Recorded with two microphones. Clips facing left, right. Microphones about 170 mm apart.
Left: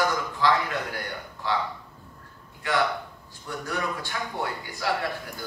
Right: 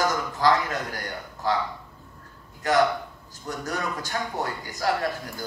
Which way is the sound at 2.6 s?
40° right (ahead or behind).